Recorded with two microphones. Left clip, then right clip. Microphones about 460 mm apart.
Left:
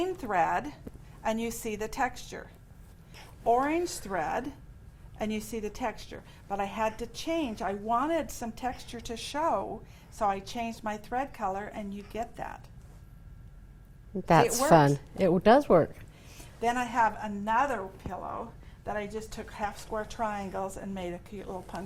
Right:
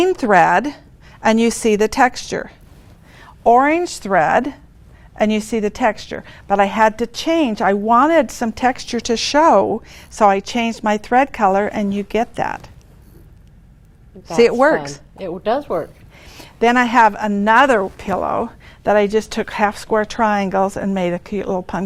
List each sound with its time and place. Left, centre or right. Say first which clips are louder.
0.0 s a woman's voice: right 16 dB; right
1.2 s a woman's voice: right 17 dB; right
3.4 s a woman's voice: right 14 dB; right
15.2 s speech: right 2 dB; left
16.3 s a woman's voice: right 15 dB; right